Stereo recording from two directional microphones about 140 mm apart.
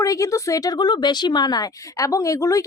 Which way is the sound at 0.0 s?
25° left (ahead or behind).